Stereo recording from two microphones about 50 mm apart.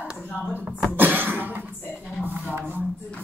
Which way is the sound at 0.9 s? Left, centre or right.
Right.